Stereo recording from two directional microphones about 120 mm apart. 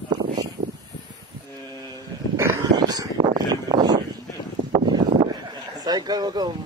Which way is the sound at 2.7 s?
35° right (ahead or behind).